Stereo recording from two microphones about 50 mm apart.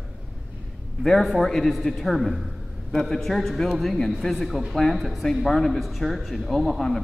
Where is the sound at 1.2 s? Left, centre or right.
Centre.